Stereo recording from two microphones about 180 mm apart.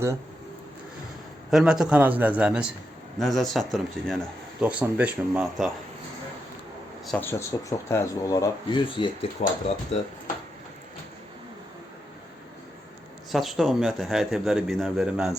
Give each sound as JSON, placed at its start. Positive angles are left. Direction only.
{"t": 1.5, "sound": "speech", "side_deg": -5}
{"t": 7.0, "sound": "speech", "side_deg": 5}
{"t": 9.4, "sound": "speech", "side_deg": 40}
{"t": 13.3, "sound": "speech", "side_deg": 0}